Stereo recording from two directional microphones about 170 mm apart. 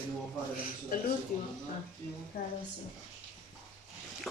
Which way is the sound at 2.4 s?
60° left (ahead or behind).